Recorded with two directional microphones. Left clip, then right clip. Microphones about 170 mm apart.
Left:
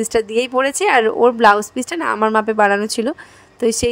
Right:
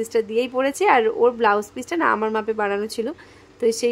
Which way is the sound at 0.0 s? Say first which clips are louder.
Left 4 dB; 35° left (ahead or behind).